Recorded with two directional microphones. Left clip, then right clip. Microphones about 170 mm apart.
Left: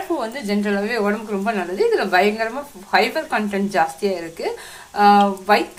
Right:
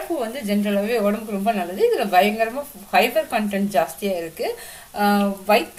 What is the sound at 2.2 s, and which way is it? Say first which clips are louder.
Speech: right 2 dB; 30° left (ahead or behind).